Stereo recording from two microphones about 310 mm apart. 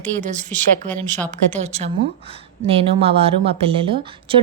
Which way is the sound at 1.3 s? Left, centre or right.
Right.